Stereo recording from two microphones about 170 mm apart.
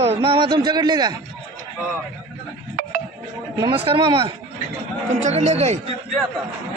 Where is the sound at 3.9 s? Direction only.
30° right (ahead or behind).